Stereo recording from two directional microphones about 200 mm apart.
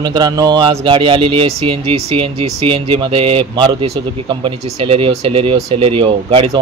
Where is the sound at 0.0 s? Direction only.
20° right (ahead or behind).